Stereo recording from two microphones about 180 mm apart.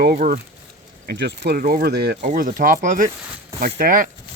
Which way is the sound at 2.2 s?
45° right (ahead or behind).